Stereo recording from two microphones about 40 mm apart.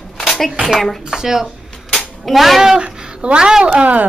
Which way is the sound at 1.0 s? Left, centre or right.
Centre.